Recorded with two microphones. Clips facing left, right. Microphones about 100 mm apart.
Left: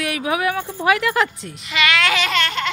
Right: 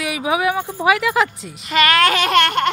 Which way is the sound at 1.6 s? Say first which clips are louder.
Right 5 dB; 45° right (ahead or behind).